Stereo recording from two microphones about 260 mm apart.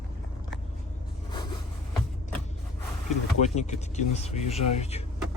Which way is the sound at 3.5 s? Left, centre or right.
Left.